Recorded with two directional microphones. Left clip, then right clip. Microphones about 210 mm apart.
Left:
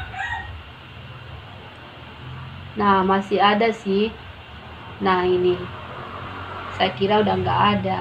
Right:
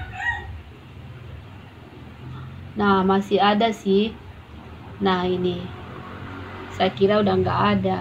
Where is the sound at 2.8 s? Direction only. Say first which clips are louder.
Left 2 dB; 25° right (ahead or behind).